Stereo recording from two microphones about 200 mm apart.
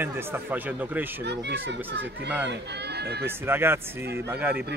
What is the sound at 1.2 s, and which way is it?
Speech, 55° right (ahead or behind).